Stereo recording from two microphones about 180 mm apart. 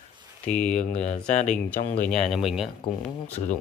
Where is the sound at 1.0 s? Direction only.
40° left (ahead or behind).